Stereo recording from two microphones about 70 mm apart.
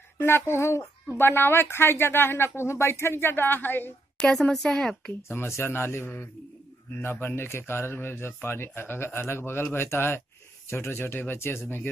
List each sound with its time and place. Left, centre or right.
0.2 s speech: left
4.2 s speech: centre
5.3 s speech: left